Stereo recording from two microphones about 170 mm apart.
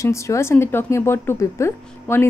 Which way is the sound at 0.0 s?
15° left (ahead or behind).